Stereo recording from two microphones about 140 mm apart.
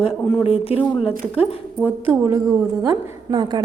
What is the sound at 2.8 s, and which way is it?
Speech, 30° right (ahead or behind).